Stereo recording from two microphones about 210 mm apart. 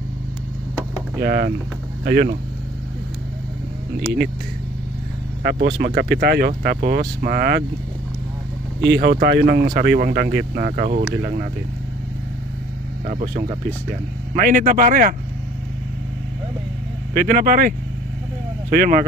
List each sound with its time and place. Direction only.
1.2 s speech: 50° right (ahead or behind)
5.4 s speech: 55° right (ahead or behind)
8.8 s speech: 55° right (ahead or behind)
14.3 s speech: 40° right (ahead or behind)
17.1 s speech: 45° right (ahead or behind)